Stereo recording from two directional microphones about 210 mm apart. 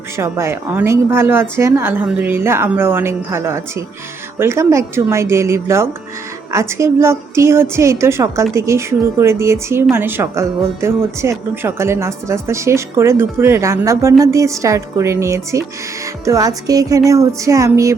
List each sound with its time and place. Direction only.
0.2 s speech: 10° right (ahead or behind)